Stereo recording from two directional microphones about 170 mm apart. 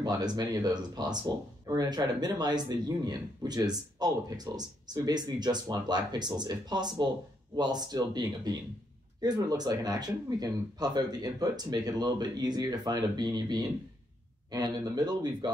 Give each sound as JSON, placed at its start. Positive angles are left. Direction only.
{"t": 0.0, "sound": "speech", "side_deg": -25}